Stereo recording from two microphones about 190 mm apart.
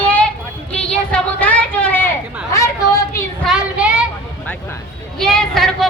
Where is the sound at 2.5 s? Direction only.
15° left (ahead or behind).